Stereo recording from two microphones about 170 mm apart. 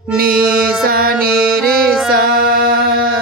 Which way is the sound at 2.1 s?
60° right (ahead or behind).